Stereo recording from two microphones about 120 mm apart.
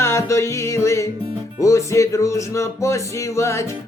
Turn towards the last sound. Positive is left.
turn(degrees=25)  # may be behind; listen again after turning